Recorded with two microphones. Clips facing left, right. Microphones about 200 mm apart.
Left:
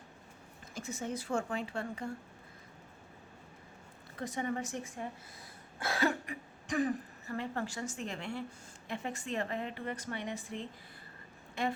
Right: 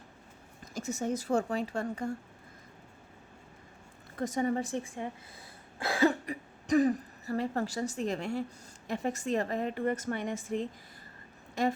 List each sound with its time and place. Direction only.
0.7 s a woman's voice: 45° right (ahead or behind)
4.2 s speech: 40° right (ahead or behind)
5.8 s cough: 20° right (ahead or behind)
6.2 s a woman's voice: 40° right (ahead or behind)